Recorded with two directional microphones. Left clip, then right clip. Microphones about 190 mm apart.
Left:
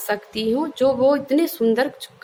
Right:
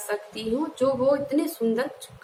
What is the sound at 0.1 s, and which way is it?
A woman's voice, 50° left (ahead or behind).